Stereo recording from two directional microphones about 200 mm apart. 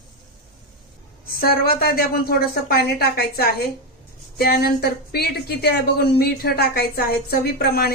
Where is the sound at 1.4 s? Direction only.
50° left (ahead or behind).